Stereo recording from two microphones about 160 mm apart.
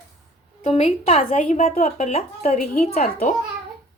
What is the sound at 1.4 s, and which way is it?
Speech, 55° left (ahead or behind).